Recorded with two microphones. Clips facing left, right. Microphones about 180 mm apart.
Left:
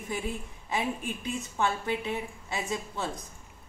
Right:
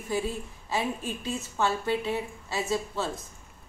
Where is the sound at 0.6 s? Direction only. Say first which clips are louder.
Right 1 dB; 15° left (ahead or behind).